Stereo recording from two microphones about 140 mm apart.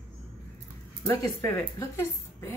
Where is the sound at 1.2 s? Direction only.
25° left (ahead or behind).